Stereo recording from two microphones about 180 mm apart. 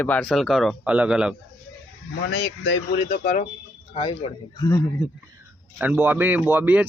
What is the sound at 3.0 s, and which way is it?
Speech, 50° left (ahead or behind).